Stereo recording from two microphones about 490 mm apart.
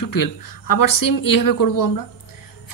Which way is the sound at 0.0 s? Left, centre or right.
Left.